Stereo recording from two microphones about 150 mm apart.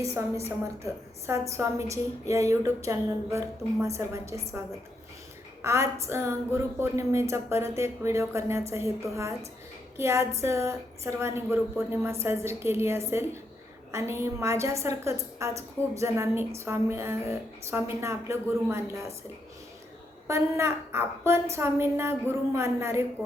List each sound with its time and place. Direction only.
0.0 s speech: 20° right (ahead or behind)
1.3 s speech: 20° right (ahead or behind)
5.6 s a woman's voice: 20° right (ahead or behind)
20.2 s a woman's voice: 20° right (ahead or behind)